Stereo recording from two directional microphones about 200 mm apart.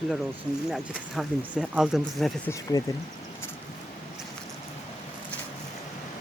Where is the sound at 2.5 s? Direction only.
15° left (ahead or behind).